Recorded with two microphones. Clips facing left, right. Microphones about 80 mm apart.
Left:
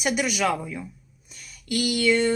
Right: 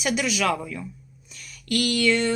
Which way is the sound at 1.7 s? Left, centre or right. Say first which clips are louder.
Even; centre.